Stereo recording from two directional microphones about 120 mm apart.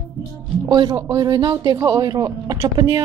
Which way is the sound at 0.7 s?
35° right (ahead or behind).